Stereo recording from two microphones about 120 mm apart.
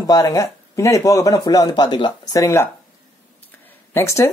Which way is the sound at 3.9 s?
25° left (ahead or behind).